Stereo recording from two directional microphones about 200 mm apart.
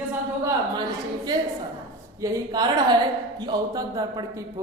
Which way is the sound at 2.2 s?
20° right (ahead or behind).